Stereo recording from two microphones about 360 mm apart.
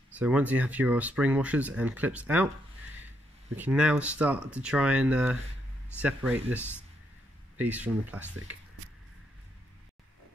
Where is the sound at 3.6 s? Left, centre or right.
Centre.